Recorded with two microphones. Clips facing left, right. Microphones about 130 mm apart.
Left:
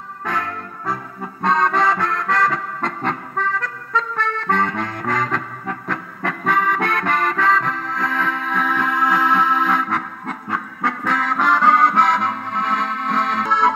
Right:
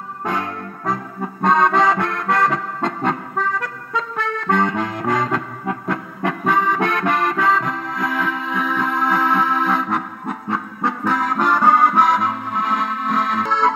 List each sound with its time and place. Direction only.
0.2 s music: 25° right (ahead or behind)
1.4 s accordion: 15° right (ahead or behind)
4.2 s music: 15° right (ahead or behind)